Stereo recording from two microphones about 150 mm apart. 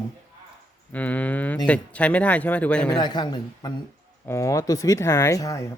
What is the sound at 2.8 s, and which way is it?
A woman's voice, 30° left (ahead or behind).